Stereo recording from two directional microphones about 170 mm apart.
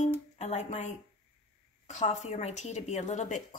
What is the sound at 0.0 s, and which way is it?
Music, 40° left (ahead or behind).